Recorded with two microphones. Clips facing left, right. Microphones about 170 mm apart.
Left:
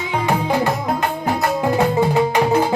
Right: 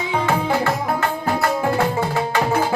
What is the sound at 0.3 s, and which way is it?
Music, 15° left (ahead or behind).